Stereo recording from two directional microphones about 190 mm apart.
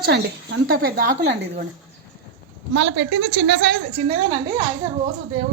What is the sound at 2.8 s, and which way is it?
Speech, 65° right (ahead or behind).